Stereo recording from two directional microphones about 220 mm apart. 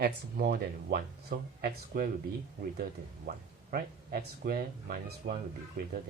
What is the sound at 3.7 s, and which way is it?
Speech, 40° right (ahead or behind).